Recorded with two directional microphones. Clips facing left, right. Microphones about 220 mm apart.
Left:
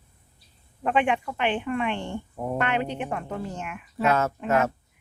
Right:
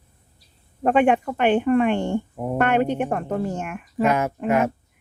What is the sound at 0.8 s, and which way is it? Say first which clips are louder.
Speech: right 6 dB; 45° right (ahead or behind).